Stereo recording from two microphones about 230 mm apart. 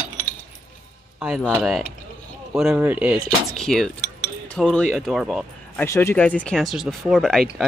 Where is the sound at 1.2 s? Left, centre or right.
Centre.